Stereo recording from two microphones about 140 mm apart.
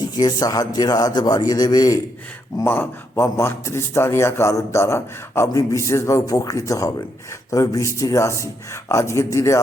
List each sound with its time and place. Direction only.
0.2 s a man's voice: 30° left (ahead or behind)
2.6 s a man's voice: 15° left (ahead or behind)